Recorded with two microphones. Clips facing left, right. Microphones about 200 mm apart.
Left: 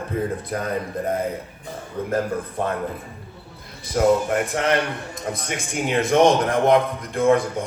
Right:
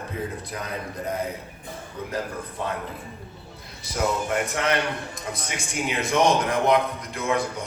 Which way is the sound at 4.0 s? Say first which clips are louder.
Left 8 dB; 45° left (ahead or behind).